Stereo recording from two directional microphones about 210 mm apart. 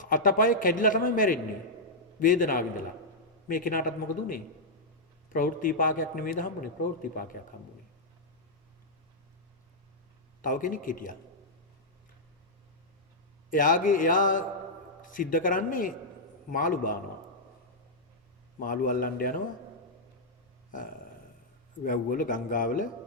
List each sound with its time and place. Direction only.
0.0 s a man's voice: 40° left (ahead or behind)
10.4 s a man's voice: 40° left (ahead or behind)
13.5 s a man's voice: 40° left (ahead or behind)
18.6 s a man's voice: 40° left (ahead or behind)
21.8 s a man's voice: 40° left (ahead or behind)